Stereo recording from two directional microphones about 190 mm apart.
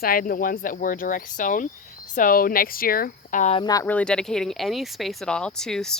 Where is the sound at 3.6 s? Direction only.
20° left (ahead or behind).